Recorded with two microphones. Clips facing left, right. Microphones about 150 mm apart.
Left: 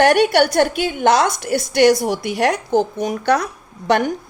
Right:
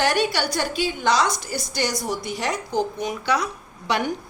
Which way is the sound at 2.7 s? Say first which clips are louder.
Left 6 dB; 45° left (ahead or behind).